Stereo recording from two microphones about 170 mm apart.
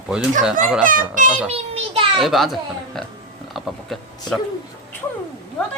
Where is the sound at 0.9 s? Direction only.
50° right (ahead or behind).